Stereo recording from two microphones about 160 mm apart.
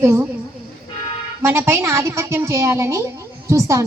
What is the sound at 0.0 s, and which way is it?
Speech, 15° right (ahead or behind).